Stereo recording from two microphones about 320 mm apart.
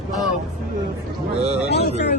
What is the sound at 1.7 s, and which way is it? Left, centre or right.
Speech, left.